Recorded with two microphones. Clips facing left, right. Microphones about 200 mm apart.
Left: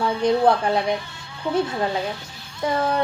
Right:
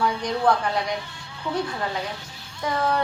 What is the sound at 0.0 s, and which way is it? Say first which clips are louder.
Speech: left 5 dB; 25° left (ahead or behind).